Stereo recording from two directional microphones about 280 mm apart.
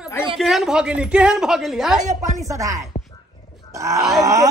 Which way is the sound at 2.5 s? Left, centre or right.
Centre.